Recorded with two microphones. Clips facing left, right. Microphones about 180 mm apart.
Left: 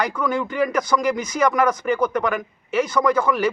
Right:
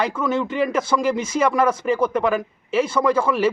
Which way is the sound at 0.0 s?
25° right (ahead or behind).